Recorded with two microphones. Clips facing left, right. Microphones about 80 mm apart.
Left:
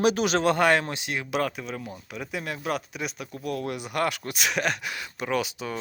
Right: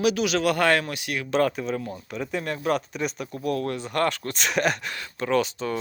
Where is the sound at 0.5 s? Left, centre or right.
Left.